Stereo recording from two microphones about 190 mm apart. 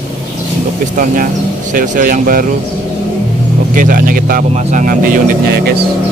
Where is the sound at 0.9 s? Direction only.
45° right (ahead or behind).